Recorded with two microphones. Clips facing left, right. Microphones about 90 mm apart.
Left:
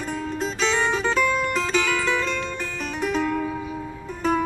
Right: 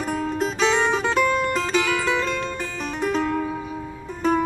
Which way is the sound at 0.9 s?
15° right (ahead or behind).